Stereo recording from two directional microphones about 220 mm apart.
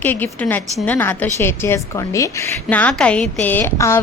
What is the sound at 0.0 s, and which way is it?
A woman's voice, 10° left (ahead or behind).